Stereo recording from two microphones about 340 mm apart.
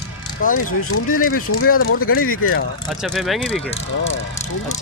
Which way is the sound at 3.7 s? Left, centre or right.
Centre.